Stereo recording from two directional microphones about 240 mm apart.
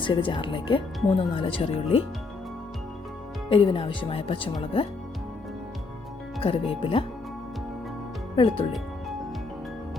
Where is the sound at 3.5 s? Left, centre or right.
Left.